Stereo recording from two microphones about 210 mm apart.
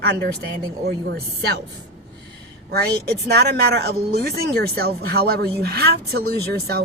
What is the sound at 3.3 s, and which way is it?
Speech, 50° right (ahead or behind).